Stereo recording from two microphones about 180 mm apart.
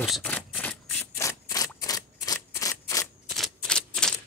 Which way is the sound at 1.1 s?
20° left (ahead or behind).